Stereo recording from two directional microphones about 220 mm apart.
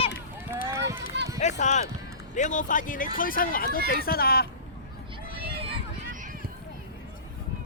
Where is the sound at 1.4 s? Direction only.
30° left (ahead or behind).